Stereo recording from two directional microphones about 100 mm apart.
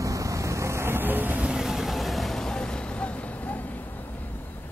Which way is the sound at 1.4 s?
5° right (ahead or behind).